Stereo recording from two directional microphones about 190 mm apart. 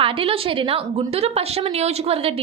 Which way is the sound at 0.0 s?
30° right (ahead or behind).